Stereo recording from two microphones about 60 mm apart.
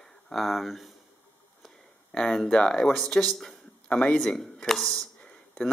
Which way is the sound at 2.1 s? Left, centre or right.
Centre.